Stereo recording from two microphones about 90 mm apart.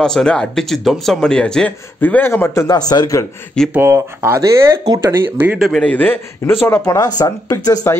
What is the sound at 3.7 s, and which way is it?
Speech, 30° right (ahead or behind).